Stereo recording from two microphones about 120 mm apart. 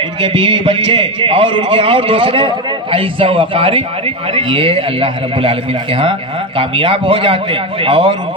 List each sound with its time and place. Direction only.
0.2 s a man's voice: 45° right (ahead or behind)